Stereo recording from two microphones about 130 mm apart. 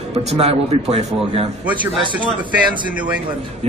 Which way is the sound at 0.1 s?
55° right (ahead or behind).